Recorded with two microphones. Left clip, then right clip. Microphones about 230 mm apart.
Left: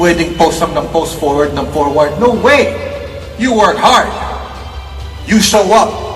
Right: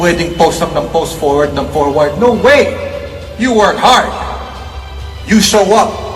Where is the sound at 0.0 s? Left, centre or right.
Centre.